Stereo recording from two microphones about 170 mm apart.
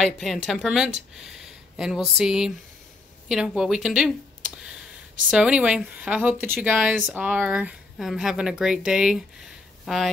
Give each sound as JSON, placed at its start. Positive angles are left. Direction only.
{"t": 0.0, "sound": "speech", "side_deg": 0}
{"t": 5.3, "sound": "speech", "side_deg": -5}